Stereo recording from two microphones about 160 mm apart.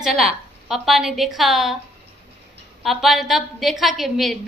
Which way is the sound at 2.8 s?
Centre (ahead or behind).